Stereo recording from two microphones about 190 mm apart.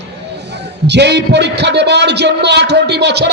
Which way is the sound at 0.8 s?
65° right (ahead or behind).